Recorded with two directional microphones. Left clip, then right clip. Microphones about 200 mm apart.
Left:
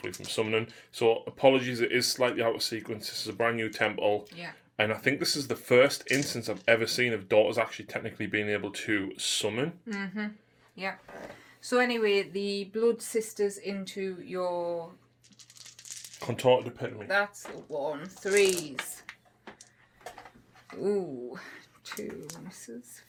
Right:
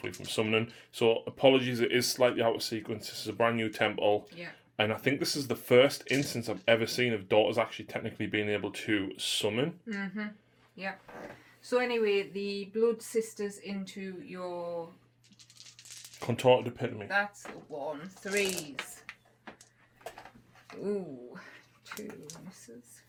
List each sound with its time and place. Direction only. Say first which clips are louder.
0.0 s speech: left 1 dB; 10° right (ahead or behind)
9.9 s speech: left 2 dB; 50° left (ahead or behind)
16.2 s speech: left 1 dB; 15° right (ahead or behind)
17.7 s speech: left 5 dB; 55° left (ahead or behind)
20.8 s speech: left 6 dB; 45° left (ahead or behind)